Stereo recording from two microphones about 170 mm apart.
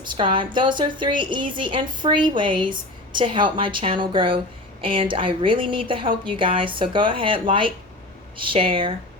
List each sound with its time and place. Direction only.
0.0 s a woman's voice: 30° right (ahead or behind)